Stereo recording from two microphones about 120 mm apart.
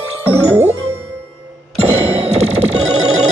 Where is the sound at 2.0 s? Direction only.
60° right (ahead or behind).